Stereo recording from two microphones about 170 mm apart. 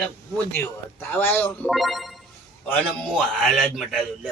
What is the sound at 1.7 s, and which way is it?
A man's voice, centre (ahead or behind).